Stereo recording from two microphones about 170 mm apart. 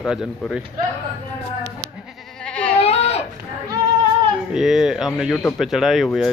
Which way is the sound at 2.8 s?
35° left (ahead or behind).